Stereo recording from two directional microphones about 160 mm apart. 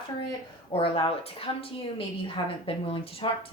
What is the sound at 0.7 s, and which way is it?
Speech, 35° left (ahead or behind).